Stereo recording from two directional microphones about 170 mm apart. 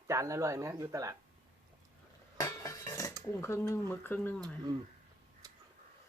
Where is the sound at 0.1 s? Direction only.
20° right (ahead or behind).